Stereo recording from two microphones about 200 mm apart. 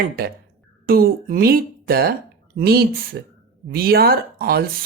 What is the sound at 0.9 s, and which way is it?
A woman's voice, 50° right (ahead or behind).